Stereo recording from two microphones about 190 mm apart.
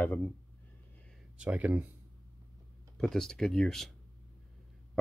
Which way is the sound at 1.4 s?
5° right (ahead or behind).